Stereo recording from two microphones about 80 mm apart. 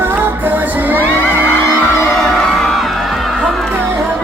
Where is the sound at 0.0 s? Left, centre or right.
Right.